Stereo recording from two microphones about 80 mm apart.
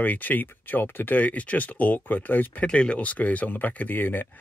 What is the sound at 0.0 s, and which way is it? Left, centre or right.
Speech, left.